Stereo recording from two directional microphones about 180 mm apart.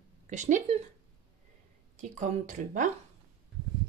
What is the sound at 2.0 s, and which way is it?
Speech, 45° right (ahead or behind).